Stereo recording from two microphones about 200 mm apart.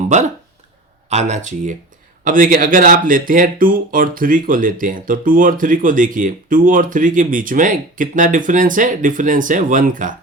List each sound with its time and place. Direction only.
1.1 s speech: 35° right (ahead or behind)